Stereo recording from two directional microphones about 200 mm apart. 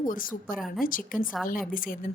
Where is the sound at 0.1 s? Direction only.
45° left (ahead or behind).